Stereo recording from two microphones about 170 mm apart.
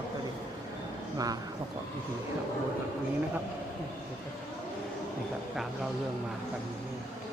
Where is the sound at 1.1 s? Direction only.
20° right (ahead or behind).